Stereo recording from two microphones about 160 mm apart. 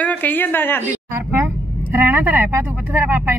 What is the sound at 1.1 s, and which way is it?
Speech, 10° right (ahead or behind).